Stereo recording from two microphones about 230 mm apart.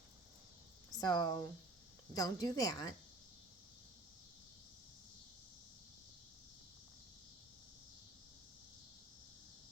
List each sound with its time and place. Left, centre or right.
1.0 s a woman's voice: centre